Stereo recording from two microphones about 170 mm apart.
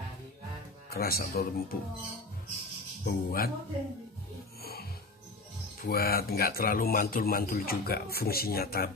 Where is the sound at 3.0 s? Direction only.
60° left (ahead or behind).